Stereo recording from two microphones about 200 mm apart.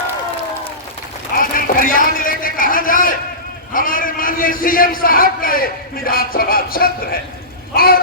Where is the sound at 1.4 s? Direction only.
45° left (ahead or behind).